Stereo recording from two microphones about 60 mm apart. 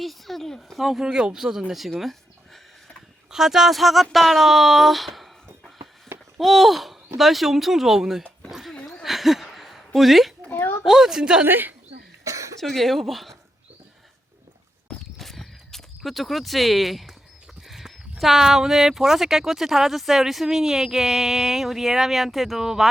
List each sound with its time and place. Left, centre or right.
0.0 s speech: centre
1.0 s speech: centre
8.7 s a sound: centre
9.0 s a sound: centre
10.5 s a sound: left
10.8 s speech: centre
11.4 s a woman's voice: right
12.2 s cough: right
12.5 s speech: centre
14.8 s a sound: centre
17.7 s livestock: centre
18.2 s speech: centre